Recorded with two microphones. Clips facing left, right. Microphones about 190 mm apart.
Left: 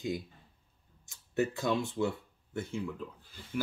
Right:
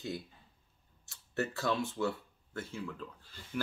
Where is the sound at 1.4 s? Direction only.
15° left (ahead or behind).